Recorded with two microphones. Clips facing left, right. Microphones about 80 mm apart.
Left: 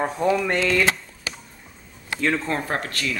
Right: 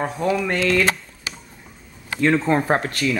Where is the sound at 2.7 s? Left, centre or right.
Centre.